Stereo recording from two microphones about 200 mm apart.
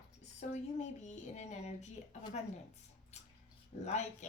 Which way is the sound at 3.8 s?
35° left (ahead or behind).